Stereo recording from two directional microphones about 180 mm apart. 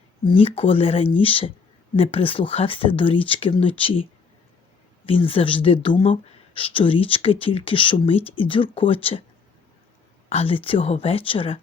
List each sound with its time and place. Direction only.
0.3 s speech: 30° left (ahead or behind)
5.0 s speech: 30° left (ahead or behind)
10.2 s speech: 35° left (ahead or behind)